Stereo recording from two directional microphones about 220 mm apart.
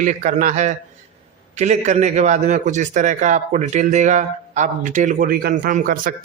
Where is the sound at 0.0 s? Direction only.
35° right (ahead or behind).